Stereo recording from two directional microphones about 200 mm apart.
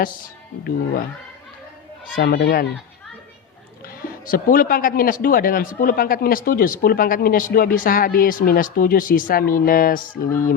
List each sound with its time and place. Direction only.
2.1 s speech: 45° left (ahead or behind)
3.8 s speech: 45° left (ahead or behind)